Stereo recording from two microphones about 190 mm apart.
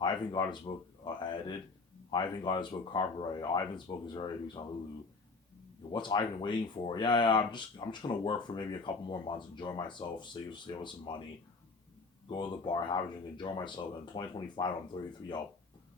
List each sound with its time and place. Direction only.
0.0 s speech: 20° left (ahead or behind)
5.9 s speech: 25° left (ahead or behind)
12.3 s speech: 25° left (ahead or behind)